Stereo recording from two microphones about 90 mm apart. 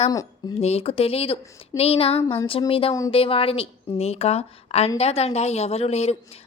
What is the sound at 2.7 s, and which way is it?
Speech, 90° left.